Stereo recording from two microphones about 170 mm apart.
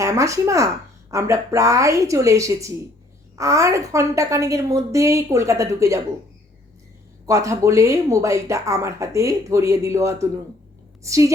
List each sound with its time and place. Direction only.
0.0 s speech: 15° right (ahead or behind)
7.3 s speech: 20° right (ahead or behind)